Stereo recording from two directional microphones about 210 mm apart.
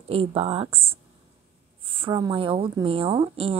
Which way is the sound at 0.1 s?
25° right (ahead or behind).